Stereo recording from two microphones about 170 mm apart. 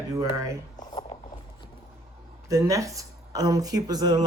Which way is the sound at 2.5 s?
20° right (ahead or behind).